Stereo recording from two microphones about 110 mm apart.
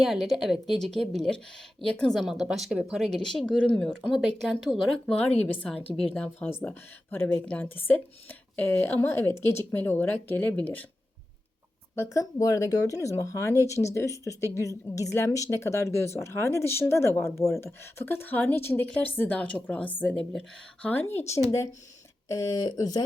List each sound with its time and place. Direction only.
0.0 s speech: centre (ahead or behind)
5.4 s a woman's voice: 15° left (ahead or behind)
11.9 s a woman's voice: 30° left (ahead or behind)